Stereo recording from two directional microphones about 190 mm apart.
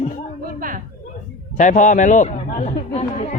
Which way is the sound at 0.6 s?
45° right (ahead or behind).